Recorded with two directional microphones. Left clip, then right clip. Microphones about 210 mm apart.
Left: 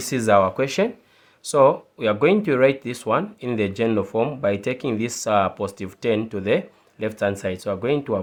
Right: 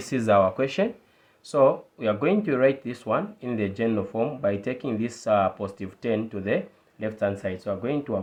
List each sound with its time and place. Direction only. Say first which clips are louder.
0.0 s speech: left 3 dB; 40° left (ahead or behind)